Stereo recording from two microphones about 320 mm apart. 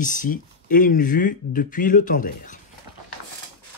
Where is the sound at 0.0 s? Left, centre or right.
Left.